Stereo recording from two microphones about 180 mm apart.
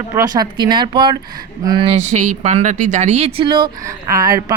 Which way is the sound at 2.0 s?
45° right (ahead or behind).